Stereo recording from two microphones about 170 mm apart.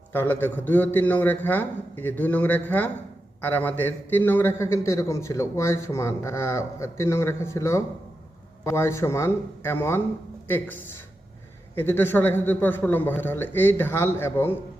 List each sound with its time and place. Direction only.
0.1 s a man's voice: 10° left (ahead or behind)
11.7 s a man's voice: 10° left (ahead or behind)